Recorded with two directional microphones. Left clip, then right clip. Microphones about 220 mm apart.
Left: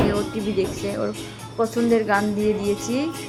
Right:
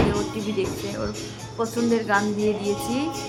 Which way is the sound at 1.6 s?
15° left (ahead or behind).